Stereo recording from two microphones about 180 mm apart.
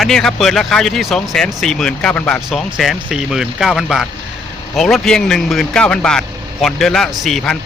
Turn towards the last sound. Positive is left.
turn(degrees=0)  # may be behind; listen again after turning